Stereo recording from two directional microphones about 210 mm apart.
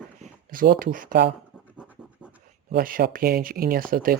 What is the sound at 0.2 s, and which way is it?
Speech, 40° right (ahead or behind).